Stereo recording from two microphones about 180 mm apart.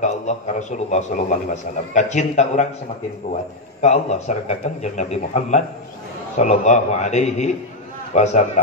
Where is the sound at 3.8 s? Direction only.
40° left (ahead or behind).